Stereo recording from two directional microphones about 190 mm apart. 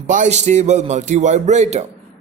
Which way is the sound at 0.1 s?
40° right (ahead or behind).